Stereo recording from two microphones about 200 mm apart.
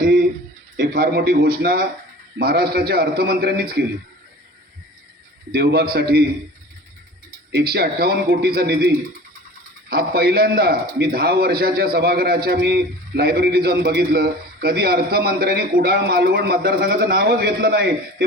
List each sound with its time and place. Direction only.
0.0 s a sound: 55° right (ahead or behind)
0.8 s a man's voice: 55° right (ahead or behind)
5.5 s a man's voice: 50° right (ahead or behind)
7.5 s a man's voice: 50° right (ahead or behind)
9.9 s a man's voice: 50° right (ahead or behind)